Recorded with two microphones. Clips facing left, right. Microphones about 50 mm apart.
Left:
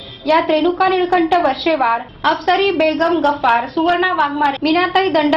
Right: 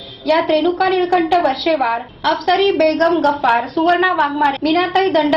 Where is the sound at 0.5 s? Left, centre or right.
Centre.